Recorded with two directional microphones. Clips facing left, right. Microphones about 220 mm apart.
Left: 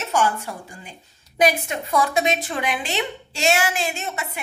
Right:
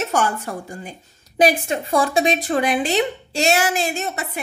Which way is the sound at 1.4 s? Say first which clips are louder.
Right 3 dB; 30° right (ahead or behind).